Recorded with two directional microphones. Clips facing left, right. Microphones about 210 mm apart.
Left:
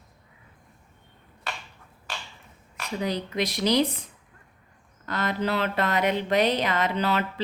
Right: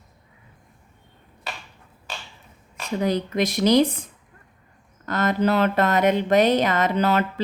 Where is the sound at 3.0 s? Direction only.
50° right (ahead or behind).